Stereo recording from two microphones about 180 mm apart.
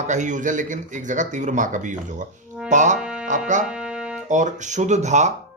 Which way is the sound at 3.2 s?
45° right (ahead or behind).